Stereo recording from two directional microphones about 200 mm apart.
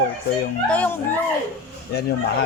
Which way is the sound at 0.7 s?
5° left (ahead or behind).